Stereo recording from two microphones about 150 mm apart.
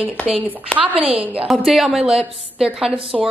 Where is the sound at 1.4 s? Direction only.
Centre (ahead or behind).